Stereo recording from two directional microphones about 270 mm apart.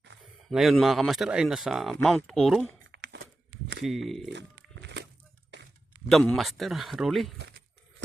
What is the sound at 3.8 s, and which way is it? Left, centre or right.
Speech, centre.